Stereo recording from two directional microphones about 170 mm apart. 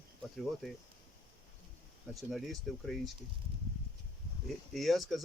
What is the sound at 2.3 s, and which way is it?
Speech, centre (ahead or behind).